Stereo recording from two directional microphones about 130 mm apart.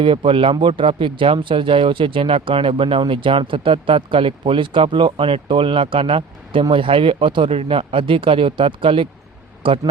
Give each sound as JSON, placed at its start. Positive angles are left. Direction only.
{"t": 0.0, "sound": "a man's voice", "side_deg": -45}